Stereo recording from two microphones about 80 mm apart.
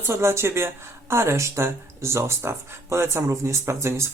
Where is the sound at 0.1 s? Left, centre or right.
Right.